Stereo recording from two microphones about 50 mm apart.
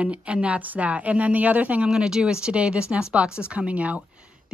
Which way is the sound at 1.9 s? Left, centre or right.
Centre.